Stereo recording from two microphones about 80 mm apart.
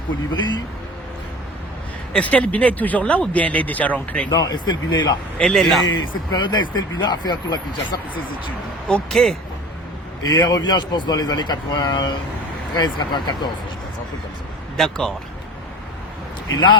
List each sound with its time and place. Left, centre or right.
2.1 s speech: centre
4.3 s speech: left
4.5 s speech: left
5.4 s speech: centre
5.8 s speech: left
8.9 s speech: centre
10.2 s speech: left
14.8 s speech: centre
16.5 s speech: left